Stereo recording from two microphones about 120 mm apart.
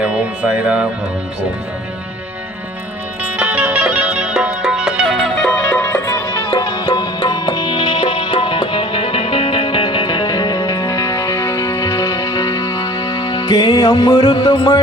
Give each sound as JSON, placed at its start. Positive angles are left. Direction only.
{"t": 0.0, "sound": "speech", "side_deg": -10}
{"t": 3.2, "sound": "music", "side_deg": -10}
{"t": 5.5, "sound": "music", "side_deg": 10}